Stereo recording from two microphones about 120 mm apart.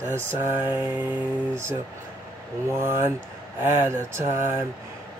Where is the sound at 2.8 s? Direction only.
20° right (ahead or behind).